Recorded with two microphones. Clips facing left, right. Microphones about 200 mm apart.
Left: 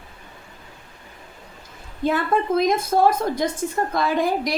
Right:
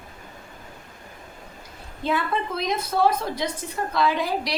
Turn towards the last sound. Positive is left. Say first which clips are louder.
# left 2 dB
turn(degrees=50)  # may be behind; listen again after turning